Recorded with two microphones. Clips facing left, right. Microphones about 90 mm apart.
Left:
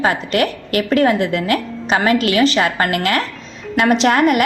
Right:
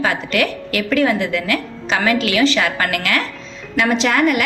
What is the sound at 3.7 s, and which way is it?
Speech, 55° left (ahead or behind).